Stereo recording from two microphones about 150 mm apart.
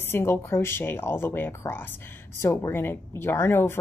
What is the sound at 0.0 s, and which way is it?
Speech, 15° left (ahead or behind).